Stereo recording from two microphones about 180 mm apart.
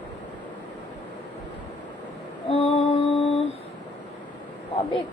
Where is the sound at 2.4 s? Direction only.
35° left (ahead or behind).